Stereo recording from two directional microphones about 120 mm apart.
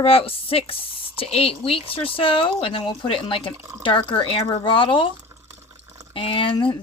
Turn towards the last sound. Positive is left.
turn(degrees=45)  # may be behind; listen again after turning